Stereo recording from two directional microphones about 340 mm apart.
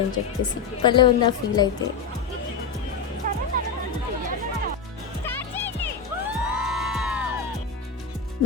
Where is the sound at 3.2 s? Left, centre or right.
Right.